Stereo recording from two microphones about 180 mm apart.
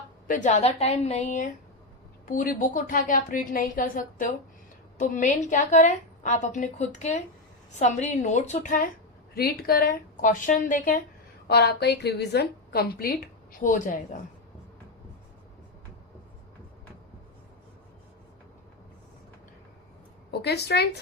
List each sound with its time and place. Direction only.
0.3 s a woman's voice: 45° left (ahead or behind)
9.3 s a woman's voice: 60° left (ahead or behind)
11.4 s a woman's voice: 65° left (ahead or behind); by 14.0 s 45° left (ahead or behind)
20.4 s a woman's voice: 65° left (ahead or behind)